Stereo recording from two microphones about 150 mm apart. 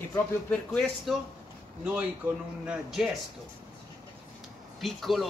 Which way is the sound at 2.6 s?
Centre (ahead or behind).